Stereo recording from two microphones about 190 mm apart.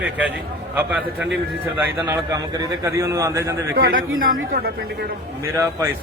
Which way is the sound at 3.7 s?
60° right (ahead or behind).